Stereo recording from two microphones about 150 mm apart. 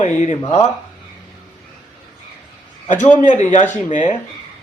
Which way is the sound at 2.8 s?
55° left (ahead or behind).